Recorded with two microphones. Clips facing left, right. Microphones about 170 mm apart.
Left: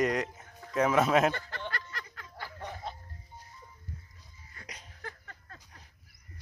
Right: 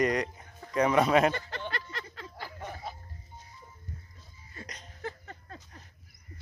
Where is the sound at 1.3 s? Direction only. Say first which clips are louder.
Right 2 dB; 20° right (ahead or behind).